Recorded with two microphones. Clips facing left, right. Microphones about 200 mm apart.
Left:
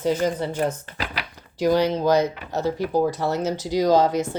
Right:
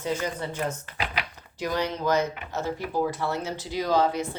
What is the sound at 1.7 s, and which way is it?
Speech, 35° left (ahead or behind).